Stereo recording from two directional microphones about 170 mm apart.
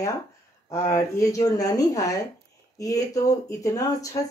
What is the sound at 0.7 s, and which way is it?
Speech, 15° left (ahead or behind).